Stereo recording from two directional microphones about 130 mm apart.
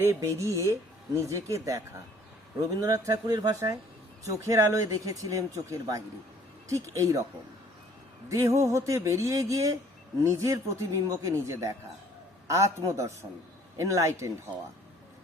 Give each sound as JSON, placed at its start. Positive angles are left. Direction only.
{"t": 0.0, "sound": "speech", "side_deg": -20}
{"t": 8.3, "sound": "speech", "side_deg": -25}
{"t": 12.9, "sound": "speech", "side_deg": -25}